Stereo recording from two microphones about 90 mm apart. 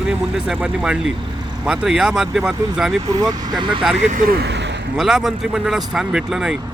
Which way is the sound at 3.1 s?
50° right (ahead or behind).